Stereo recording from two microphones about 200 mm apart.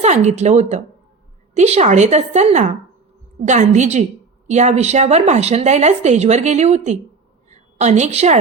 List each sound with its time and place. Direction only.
0.0 s a woman's voice: 35° right (ahead or behind)